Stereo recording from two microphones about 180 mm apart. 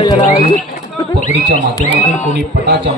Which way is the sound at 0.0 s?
35° left (ahead or behind).